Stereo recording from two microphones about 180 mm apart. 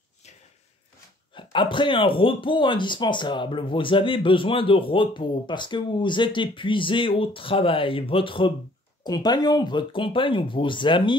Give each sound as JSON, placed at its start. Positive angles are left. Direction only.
{"t": 1.3, "sound": "speech", "side_deg": 25}